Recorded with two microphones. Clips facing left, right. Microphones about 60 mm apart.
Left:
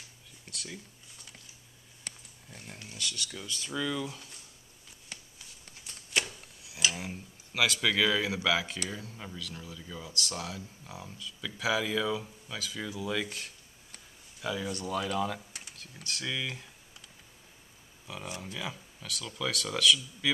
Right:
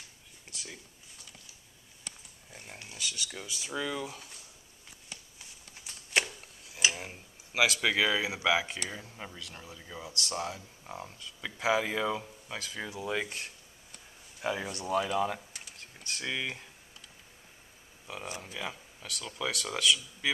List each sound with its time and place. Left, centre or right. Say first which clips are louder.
0.5 s a sound: left 2 dB; centre
2.5 s speech: left 1 dB; centre
3.7 s speech: left 1 dB; right
4.0 s speech: left 1 dB; centre
6.8 s cutlery: right 1 dB; right
7.5 s speech: right 1 dB; centre; by 14.8 s right
14.8 s speech: right 4 dB; right
18.2 s speech: even; centre
19.2 s speech: even; centre